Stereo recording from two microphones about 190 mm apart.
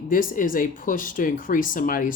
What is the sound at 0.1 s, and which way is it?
Speech, 45° left (ahead or behind).